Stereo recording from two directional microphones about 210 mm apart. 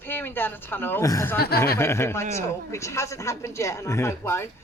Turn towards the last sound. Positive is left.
turn(degrees=10)  # may be behind; listen again after turning